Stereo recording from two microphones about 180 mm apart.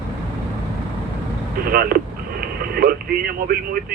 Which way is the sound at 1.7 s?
55° right (ahead or behind).